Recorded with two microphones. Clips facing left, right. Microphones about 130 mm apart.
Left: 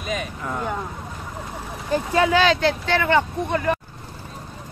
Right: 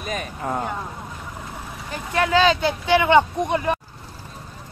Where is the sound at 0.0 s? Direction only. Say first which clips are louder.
Even; 40° right (ahead or behind).